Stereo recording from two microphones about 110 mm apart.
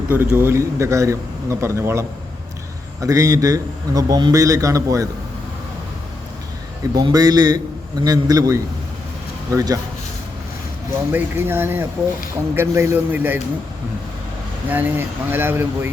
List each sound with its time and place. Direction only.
0.1 s a man's voice: 15° right (ahead or behind)
6.9 s a man's voice: 35° right (ahead or behind)
11.1 s a man's voice: 20° right (ahead or behind)
14.7 s a man's voice: 15° right (ahead or behind)